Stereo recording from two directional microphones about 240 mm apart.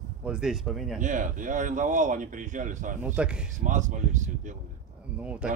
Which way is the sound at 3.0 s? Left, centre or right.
Centre.